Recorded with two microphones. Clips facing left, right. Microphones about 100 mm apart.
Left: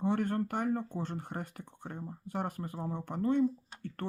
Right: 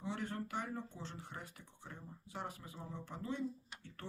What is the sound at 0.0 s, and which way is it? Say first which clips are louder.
Speech: left 11 dB; 55° left (ahead or behind).